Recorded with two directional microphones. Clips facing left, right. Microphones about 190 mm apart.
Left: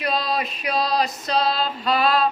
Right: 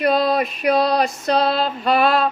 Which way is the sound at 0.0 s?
55° right (ahead or behind).